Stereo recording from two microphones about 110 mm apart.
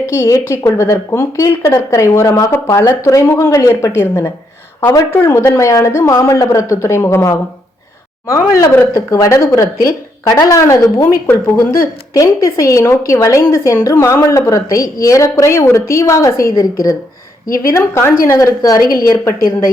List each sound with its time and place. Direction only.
0.0 s speech: 25° left (ahead or behind)